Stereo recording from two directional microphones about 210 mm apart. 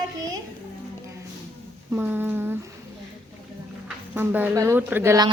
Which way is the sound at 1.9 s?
10° right (ahead or behind).